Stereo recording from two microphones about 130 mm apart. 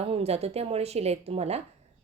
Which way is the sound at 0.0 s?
50° right (ahead or behind).